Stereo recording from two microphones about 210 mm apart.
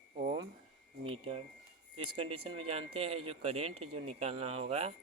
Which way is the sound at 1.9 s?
25° right (ahead or behind).